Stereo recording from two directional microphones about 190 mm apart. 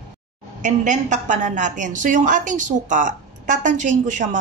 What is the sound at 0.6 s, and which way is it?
A woman's voice, 40° right (ahead or behind).